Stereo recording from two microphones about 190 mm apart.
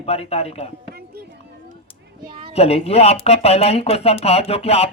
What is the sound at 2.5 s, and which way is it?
Speech, 35° left (ahead or behind).